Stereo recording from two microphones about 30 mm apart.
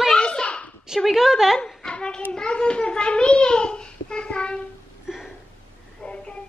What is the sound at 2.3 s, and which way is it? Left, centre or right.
A child's voice, left.